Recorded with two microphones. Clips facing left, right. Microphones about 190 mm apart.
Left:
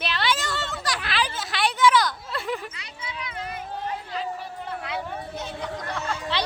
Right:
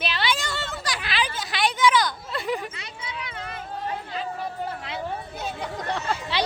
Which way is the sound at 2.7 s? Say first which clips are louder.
Right 1 dB; 25° right (ahead or behind).